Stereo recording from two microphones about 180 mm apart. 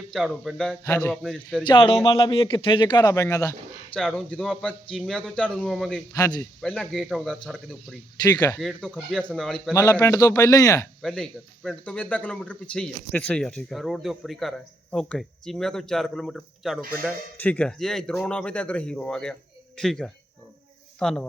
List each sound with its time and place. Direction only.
0.1 s speech: centre (ahead or behind)
1.6 s a man's voice: 30° left (ahead or behind)
3.9 s speech: 5° left (ahead or behind)
6.1 s a man's voice: 20° left (ahead or behind)
6.6 s speech: 5° left (ahead or behind)
8.2 s a man's voice: 20° left (ahead or behind)
8.5 s speech: centre (ahead or behind)
9.7 s a man's voice: 20° left (ahead or behind)
11.0 s speech: 5° left (ahead or behind)